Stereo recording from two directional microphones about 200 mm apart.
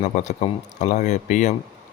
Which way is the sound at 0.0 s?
35° left (ahead or behind).